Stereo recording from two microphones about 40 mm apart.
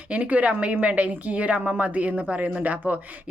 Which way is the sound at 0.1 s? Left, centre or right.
Right.